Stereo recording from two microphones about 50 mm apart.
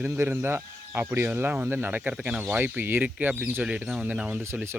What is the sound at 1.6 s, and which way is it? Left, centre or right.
Speech, right.